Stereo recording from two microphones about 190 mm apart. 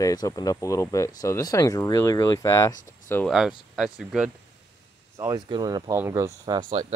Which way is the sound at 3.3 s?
Centre (ahead or behind).